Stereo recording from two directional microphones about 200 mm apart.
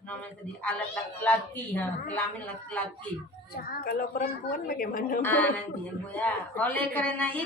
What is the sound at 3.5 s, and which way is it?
A woman's voice, 45° left (ahead or behind).